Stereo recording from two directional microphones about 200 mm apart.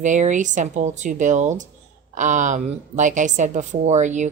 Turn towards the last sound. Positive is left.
turn(degrees=-35)  # may be behind; listen again after turning